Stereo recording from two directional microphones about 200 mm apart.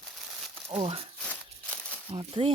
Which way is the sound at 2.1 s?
25° right (ahead or behind).